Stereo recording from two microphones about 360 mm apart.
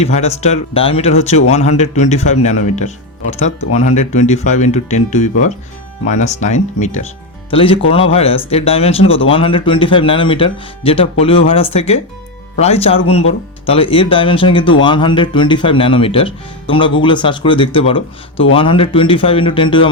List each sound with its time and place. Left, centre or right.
0.0 s speech: centre